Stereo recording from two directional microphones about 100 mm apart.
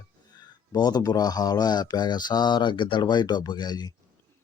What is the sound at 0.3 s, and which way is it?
Speech, 45° left (ahead or behind).